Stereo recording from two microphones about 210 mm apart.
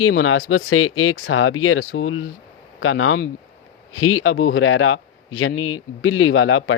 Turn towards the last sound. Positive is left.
turn(degrees=80)